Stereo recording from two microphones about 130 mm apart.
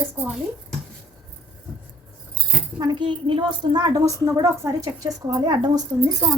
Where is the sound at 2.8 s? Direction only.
35° right (ahead or behind).